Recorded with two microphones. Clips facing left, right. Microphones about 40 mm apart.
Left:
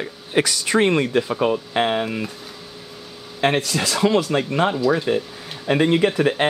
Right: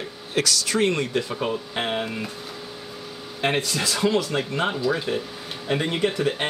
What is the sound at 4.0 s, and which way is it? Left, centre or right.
Speech, centre.